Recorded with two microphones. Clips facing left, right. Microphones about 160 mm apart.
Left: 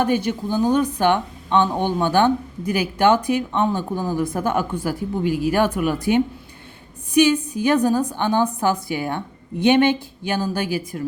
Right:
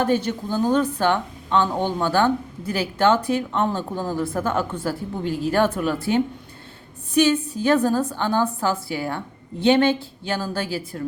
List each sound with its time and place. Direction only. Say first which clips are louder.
0.0 s speech: left 1 dB; 15° left (ahead or behind)